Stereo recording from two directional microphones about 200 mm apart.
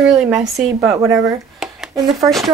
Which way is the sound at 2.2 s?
Centre (ahead or behind).